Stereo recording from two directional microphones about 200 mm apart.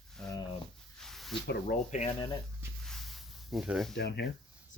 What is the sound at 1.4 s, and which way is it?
Speech, 50° left (ahead or behind).